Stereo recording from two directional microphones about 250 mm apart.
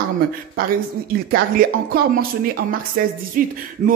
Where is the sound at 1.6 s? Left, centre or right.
Right.